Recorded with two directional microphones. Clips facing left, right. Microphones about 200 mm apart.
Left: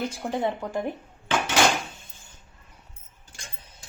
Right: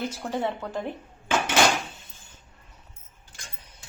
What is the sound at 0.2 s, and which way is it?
Speech, 15° left (ahead or behind).